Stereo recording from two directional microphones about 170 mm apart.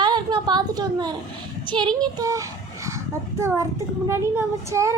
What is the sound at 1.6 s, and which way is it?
A child's voice, 25° right (ahead or behind).